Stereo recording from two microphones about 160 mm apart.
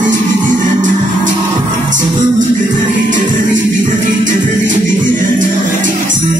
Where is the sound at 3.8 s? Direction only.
55° right (ahead or behind).